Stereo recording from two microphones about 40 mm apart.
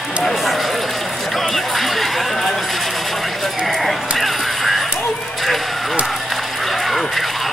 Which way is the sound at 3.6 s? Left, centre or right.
Centre.